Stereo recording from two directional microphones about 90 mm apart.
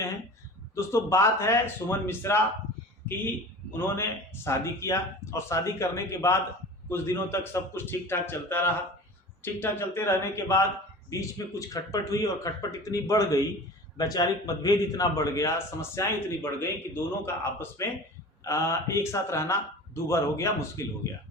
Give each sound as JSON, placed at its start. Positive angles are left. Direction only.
{"t": 0.8, "sound": "a man's voice", "side_deg": 35}
{"t": 3.7, "sound": "a man's voice", "side_deg": 25}